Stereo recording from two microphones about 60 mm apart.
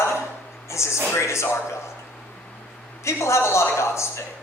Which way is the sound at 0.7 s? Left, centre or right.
Left.